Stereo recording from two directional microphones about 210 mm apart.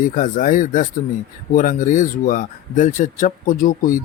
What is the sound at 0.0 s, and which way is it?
Speech, 40° left (ahead or behind).